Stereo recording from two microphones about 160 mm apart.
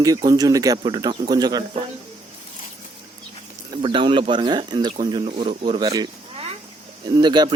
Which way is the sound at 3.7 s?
30° right (ahead or behind).